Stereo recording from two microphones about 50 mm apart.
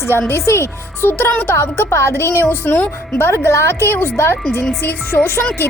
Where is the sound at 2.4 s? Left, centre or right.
Left.